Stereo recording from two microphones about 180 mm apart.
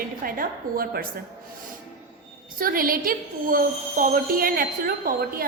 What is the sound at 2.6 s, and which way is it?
A woman's voice, 50° right (ahead or behind).